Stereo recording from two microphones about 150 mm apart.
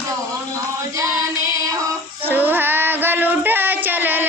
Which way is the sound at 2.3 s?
15° right (ahead or behind).